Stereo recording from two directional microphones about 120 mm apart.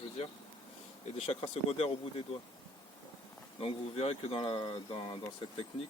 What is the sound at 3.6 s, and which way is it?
Speech, 55° left (ahead or behind).